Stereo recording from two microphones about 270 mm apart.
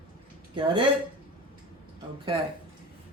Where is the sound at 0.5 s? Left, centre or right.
Centre.